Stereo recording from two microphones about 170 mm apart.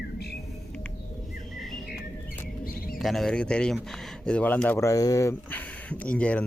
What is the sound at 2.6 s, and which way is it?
Chirp, 55° left (ahead or behind).